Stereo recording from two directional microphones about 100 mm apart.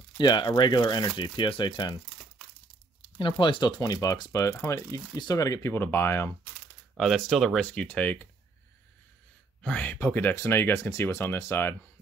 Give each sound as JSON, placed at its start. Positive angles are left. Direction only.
{"t": 0.2, "sound": "speech", "side_deg": 45}
{"t": 3.2, "sound": "speech", "side_deg": 55}
{"t": 7.0, "sound": "speech", "side_deg": 0}
{"t": 7.6, "sound": "speech", "side_deg": 10}
{"t": 9.6, "sound": "speech", "side_deg": 15}